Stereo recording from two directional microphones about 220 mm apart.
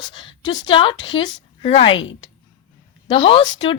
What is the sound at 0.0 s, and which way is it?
A woman's voice, 20° left (ahead or behind).